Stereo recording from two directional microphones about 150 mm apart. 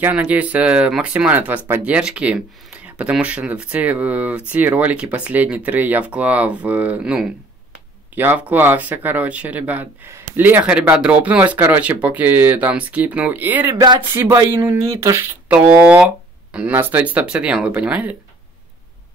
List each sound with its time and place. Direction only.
0.0 s speech: 10° right (ahead or behind)
13.7 s speech: 30° right (ahead or behind)
14.1 s speech: 15° right (ahead or behind)